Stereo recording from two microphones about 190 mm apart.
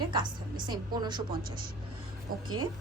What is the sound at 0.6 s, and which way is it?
Speech, 25° right (ahead or behind).